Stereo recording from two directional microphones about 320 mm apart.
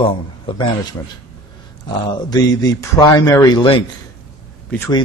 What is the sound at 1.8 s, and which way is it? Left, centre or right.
Speech, centre.